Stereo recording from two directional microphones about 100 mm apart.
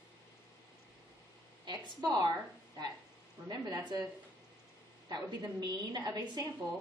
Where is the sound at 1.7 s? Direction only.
45° right (ahead or behind).